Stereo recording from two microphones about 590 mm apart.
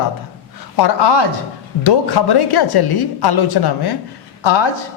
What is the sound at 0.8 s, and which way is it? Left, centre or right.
A woman's voice, left.